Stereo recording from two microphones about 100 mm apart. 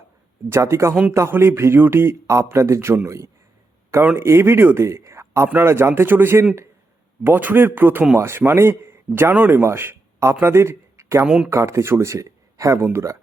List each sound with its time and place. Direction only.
0.5 s speech: 30° right (ahead or behind)
4.2 s speech: 25° right (ahead or behind)